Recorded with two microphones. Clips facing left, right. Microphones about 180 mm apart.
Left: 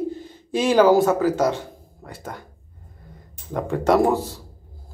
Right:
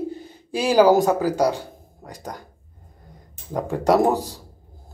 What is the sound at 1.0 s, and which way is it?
Speech, 35° right (ahead or behind).